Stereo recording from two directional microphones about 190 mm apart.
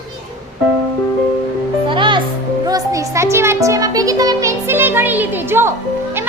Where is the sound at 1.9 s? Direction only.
25° right (ahead or behind).